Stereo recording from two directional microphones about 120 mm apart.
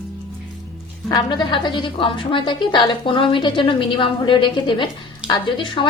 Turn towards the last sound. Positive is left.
turn(degrees=40)  # may be behind; listen again after turning